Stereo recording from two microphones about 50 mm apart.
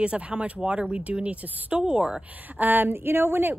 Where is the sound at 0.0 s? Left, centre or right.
Right.